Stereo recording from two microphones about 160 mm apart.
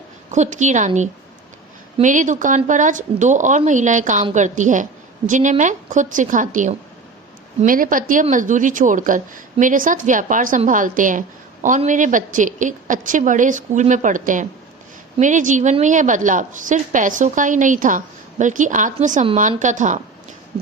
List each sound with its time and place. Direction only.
0.3 s a woman's voice: 50° right (ahead or behind)